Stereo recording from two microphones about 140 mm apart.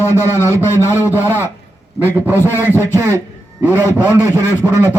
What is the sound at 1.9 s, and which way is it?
Speech, 15° right (ahead or behind).